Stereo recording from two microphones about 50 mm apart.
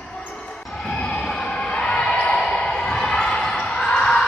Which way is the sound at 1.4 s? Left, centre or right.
Left.